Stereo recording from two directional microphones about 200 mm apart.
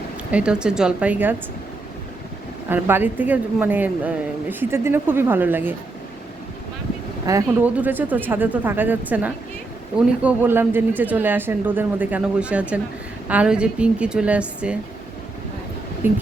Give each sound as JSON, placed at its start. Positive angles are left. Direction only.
{"t": 0.3, "sound": "speech", "side_deg": -5}
{"t": 2.6, "sound": "speech", "side_deg": -10}
{"t": 7.3, "sound": "speech", "side_deg": -10}
{"t": 16.0, "sound": "speech", "side_deg": -10}